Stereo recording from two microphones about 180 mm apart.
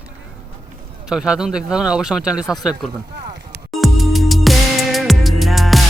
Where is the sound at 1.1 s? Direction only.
5° right (ahead or behind).